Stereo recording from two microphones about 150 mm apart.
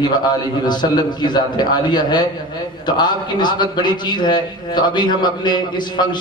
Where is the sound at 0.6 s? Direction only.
30° left (ahead or behind).